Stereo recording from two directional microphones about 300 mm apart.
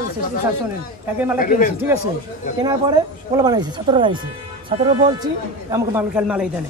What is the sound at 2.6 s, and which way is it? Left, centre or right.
Speech, centre.